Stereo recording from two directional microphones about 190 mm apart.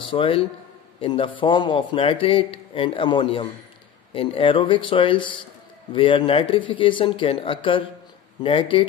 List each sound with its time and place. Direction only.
0.0 s a man's voice: 25° left (ahead or behind)